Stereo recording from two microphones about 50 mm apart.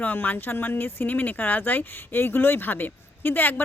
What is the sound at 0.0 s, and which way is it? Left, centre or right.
Speech, left.